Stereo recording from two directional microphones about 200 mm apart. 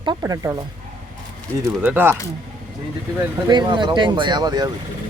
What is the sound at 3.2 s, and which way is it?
Speech, 20° right (ahead or behind).